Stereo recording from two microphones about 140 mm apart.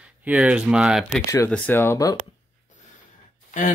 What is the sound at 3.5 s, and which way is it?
Speech, 70° left (ahead or behind).